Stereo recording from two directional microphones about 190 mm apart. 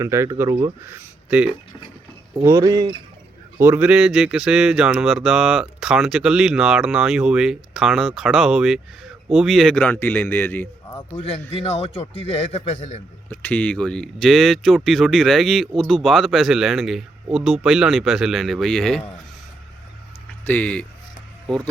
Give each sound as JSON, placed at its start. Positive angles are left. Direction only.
{"t": 0.0, "sound": "speech", "side_deg": -15}
{"t": 3.6, "sound": "speech", "side_deg": -10}
{"t": 11.2, "sound": "a man's voice", "side_deg": 30}
{"t": 13.3, "sound": "speech", "side_deg": 10}
{"t": 20.4, "sound": "speech", "side_deg": 10}